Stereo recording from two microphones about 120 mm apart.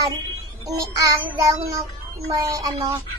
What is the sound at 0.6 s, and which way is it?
A child's voice, 30° right (ahead or behind).